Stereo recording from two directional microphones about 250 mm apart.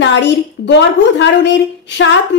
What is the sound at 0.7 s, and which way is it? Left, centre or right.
Speech, left.